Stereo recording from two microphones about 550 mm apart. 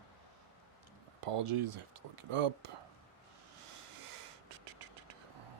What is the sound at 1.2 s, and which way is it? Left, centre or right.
Speech, right.